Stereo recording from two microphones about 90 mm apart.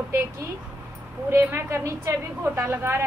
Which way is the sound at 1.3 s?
30° right (ahead or behind).